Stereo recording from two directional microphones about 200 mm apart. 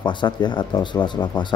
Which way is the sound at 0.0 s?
20° left (ahead or behind).